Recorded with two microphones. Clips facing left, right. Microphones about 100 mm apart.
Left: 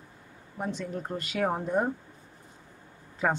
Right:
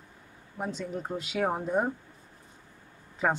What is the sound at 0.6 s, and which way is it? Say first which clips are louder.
Speech: even; centre (ahead or behind).